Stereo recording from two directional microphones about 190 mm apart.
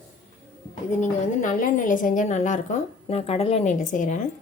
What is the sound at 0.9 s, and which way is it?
Speech, 40° left (ahead or behind).